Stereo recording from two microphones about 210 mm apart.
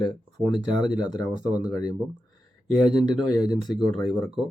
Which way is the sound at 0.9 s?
5° right (ahead or behind).